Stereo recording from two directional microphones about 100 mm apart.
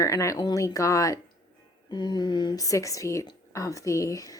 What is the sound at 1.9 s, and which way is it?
A woman's voice, 45° left (ahead or behind).